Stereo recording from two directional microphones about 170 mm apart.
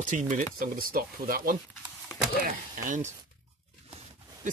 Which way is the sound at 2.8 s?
50° right (ahead or behind).